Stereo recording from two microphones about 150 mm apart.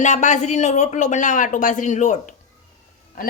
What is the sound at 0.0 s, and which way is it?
Speech, 55° left (ahead or behind).